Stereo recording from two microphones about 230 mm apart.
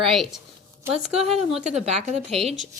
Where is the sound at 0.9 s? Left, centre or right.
Right.